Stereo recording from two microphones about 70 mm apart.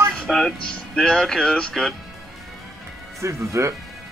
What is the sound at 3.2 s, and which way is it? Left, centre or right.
Speech, right.